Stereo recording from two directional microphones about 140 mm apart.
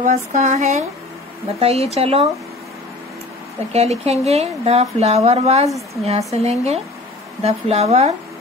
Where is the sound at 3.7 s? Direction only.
50° right (ahead or behind).